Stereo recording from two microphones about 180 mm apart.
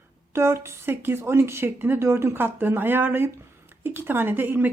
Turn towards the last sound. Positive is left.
turn(degrees=-10)  # may be behind; listen again after turning